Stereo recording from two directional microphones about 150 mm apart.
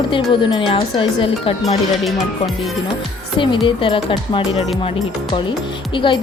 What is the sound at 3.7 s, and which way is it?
Speech, 35° left (ahead or behind).